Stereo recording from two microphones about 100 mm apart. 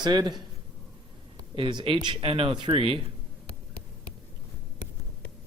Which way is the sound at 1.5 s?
55° right (ahead or behind).